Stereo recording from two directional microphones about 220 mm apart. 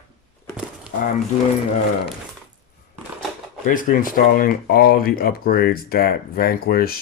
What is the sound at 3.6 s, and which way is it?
Speech, 40° left (ahead or behind).